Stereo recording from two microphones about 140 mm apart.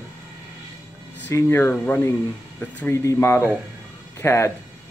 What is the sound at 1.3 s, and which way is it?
Speech, 20° left (ahead or behind).